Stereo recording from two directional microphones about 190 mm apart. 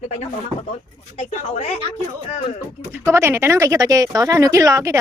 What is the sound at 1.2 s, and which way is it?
Speech, 35° left (ahead or behind).